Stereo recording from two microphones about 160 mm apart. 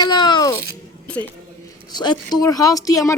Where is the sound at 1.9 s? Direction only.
25° left (ahead or behind).